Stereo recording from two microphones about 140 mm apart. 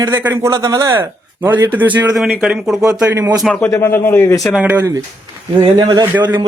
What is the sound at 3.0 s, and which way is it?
Speech, 15° right (ahead or behind).